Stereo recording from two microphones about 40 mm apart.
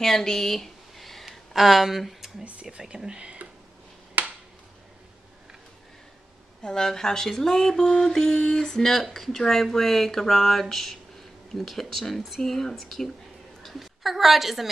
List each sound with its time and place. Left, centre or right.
0.0 s a sound: centre
1.5 s speech: centre
3.1 s speech: right
4.2 s finger snapping: right
6.6 s a woman's voice: centre